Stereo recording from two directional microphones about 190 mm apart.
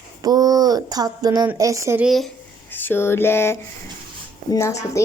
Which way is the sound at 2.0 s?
Centre (ahead or behind).